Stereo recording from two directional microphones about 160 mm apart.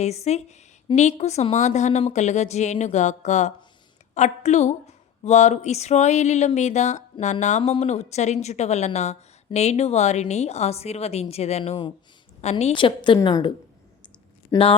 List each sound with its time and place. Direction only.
0.0 s a woman's voice: 45° left (ahead or behind); by 13.5 s 25° left (ahead or behind)